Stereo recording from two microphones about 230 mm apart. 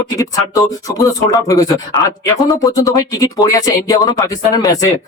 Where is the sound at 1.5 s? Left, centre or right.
Centre.